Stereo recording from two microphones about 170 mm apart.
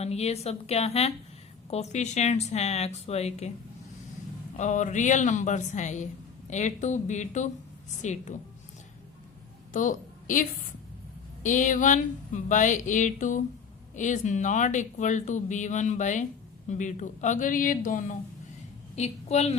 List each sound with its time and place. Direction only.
0.0 s speech: 40° left (ahead or behind)
4.5 s speech: 45° left (ahead or behind)
9.7 s a woman's voice: 50° left (ahead or behind)
11.4 s speech: 50° left (ahead or behind)
18.9 s speech: 40° left (ahead or behind)